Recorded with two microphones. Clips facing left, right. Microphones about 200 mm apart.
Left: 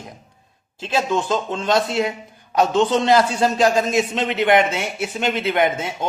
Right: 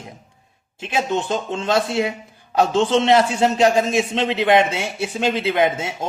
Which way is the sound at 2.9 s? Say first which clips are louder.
Right 1 dB; 25° right (ahead or behind).